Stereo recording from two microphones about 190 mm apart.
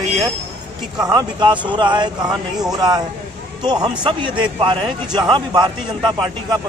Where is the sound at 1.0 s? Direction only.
25° right (ahead or behind).